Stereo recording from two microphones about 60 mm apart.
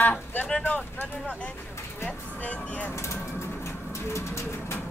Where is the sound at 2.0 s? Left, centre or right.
Left.